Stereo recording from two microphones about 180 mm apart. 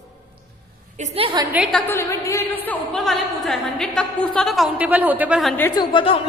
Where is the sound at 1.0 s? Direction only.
30° right (ahead or behind).